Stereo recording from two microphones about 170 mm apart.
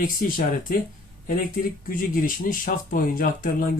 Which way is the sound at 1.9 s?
55° left (ahead or behind).